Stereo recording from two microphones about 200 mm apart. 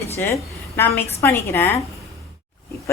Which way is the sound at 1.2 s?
10° left (ahead or behind).